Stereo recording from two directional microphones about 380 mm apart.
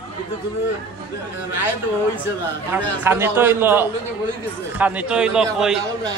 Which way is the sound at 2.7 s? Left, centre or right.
Centre.